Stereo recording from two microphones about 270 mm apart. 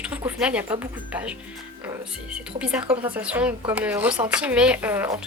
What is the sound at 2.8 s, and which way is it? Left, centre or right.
Speech, right.